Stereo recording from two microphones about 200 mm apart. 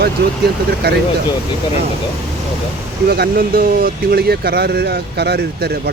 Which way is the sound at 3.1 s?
50° right (ahead or behind).